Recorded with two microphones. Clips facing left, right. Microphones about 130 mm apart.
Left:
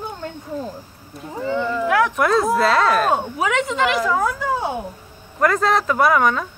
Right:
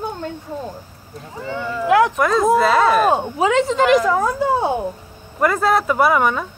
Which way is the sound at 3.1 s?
30° right (ahead or behind).